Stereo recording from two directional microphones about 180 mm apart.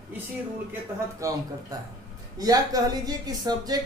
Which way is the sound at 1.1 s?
20° right (ahead or behind).